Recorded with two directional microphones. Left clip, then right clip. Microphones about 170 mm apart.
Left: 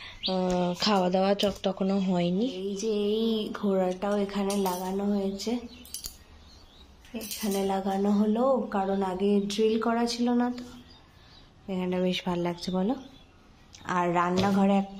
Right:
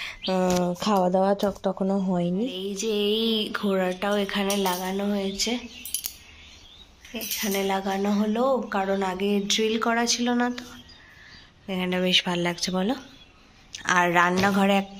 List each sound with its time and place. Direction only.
0.2 s speech: 15° right (ahead or behind)
2.8 s speech: centre (ahead or behind)
7.2 s speech: 5° right (ahead or behind)
11.6 s a woman's voice: 5° left (ahead or behind)